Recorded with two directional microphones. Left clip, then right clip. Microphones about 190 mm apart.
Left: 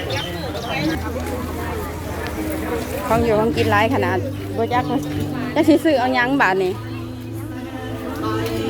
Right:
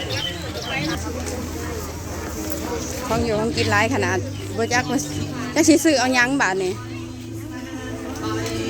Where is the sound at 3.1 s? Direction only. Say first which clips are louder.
Left 5 dB; 5° right (ahead or behind).